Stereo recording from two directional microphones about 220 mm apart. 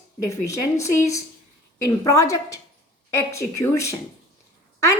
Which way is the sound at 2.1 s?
15° left (ahead or behind).